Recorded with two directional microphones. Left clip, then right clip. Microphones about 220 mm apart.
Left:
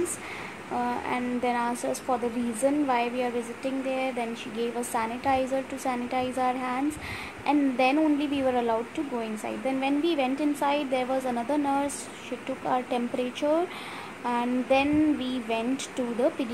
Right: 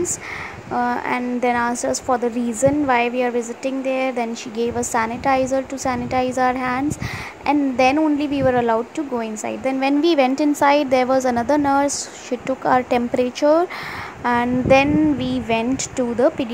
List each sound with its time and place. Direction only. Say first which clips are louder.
0.7 s a woman's voice: right 8 dB; 25° right (ahead or behind)